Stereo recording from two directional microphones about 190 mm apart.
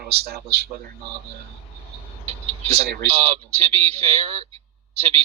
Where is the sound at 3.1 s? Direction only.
30° right (ahead or behind).